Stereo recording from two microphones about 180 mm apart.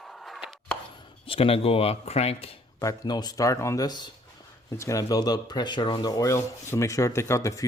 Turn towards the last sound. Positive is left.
turn(degrees=15)  # may be behind; listen again after turning